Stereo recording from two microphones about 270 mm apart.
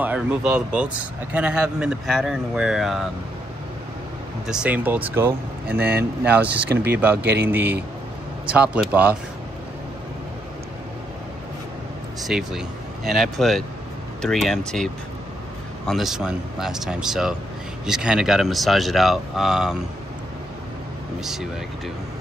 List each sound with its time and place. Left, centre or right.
0.0 s speech: centre
4.5 s speech: centre
5.8 s speech: right
6.2 s speech: centre
6.7 s speech: right
7.2 s a man's voice: centre
12.3 s speech: centre
15.9 s speech: centre
21.2 s speech: centre